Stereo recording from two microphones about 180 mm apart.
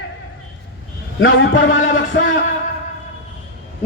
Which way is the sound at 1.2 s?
90° left.